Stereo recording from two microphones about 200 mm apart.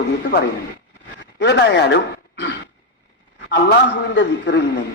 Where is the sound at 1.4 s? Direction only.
60° left (ahead or behind).